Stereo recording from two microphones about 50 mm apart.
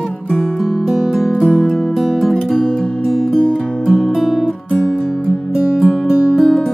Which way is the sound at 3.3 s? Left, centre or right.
Centre.